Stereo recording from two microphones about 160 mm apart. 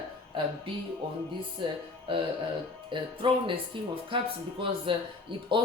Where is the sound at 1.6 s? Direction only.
30° right (ahead or behind).